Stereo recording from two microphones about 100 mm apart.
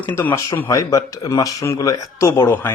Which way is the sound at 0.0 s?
20° left (ahead or behind).